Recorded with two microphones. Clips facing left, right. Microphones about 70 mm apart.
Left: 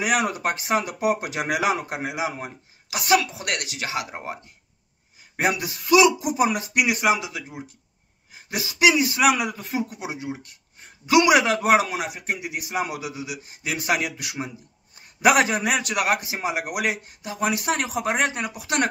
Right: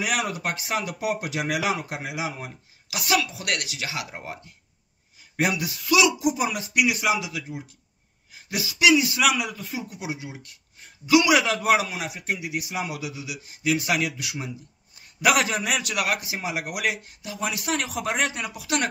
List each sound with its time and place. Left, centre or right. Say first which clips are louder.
0.0 s a man's voice: left 4 dB; left
4.1 s speech: left 3 dB; left
5.4 s a man's voice: left 1 dB; left
15.0 s a sound: left 3 dB; left
15.6 s a man's voice: left 3 dB; left